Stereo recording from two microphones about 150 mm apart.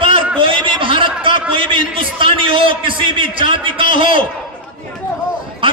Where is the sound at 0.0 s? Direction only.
35° right (ahead or behind).